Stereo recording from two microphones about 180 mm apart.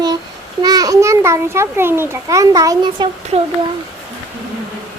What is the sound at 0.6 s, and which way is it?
A child's voice, 20° right (ahead or behind).